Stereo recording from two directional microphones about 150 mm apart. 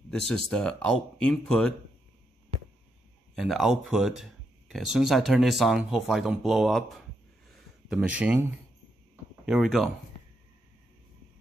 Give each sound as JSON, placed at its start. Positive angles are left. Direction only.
{"t": 0.3, "sound": "speech", "side_deg": 5}
{"t": 3.3, "sound": "speech", "side_deg": 0}